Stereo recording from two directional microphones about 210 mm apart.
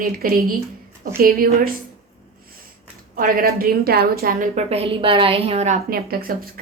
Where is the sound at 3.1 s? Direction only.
45° right (ahead or behind).